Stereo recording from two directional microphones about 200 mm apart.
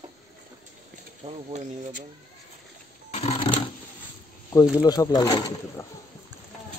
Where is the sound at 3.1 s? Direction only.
30° left (ahead or behind).